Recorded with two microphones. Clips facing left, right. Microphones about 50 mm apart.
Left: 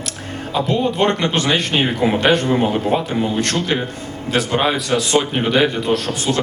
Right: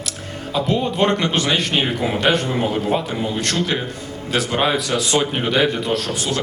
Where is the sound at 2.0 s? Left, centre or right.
Left.